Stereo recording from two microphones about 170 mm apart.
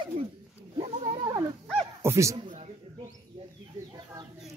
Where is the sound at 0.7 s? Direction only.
30° right (ahead or behind).